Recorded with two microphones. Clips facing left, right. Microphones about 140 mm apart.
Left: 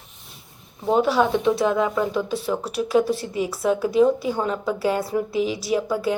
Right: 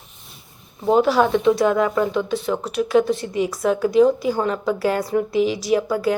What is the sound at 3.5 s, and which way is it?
A woman's voice, 5° left (ahead or behind).